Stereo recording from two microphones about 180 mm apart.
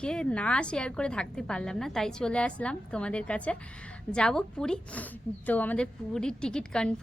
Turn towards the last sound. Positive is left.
turn(degrees=5)  # may be behind; listen again after turning